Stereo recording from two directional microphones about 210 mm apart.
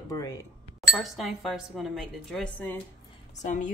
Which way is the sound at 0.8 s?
Centre (ahead or behind).